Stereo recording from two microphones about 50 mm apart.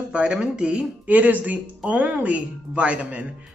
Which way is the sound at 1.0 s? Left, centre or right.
Right.